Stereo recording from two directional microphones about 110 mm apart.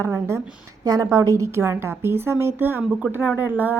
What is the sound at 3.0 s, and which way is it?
Speech, 5° right (ahead or behind).